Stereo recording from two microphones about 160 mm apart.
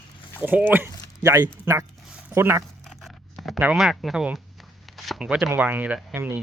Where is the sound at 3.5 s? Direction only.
5° right (ahead or behind).